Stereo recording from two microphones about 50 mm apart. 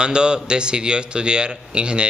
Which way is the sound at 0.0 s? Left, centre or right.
Centre.